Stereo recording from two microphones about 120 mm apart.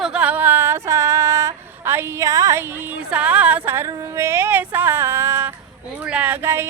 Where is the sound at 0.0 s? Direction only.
10° right (ahead or behind); by 2.6 s 25° right (ahead or behind).